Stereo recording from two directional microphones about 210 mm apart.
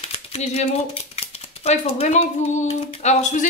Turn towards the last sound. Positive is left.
turn(degrees=30)  # may be behind; listen again after turning